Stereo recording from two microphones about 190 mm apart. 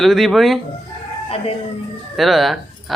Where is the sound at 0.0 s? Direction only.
Centre (ahead or behind).